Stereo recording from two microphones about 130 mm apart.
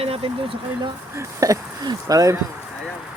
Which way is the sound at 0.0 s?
50° right (ahead or behind).